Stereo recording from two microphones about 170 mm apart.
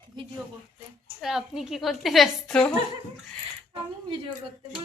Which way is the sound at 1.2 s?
Centre (ahead or behind).